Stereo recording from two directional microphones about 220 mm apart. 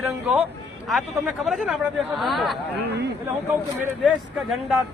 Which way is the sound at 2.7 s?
50° right (ahead or behind).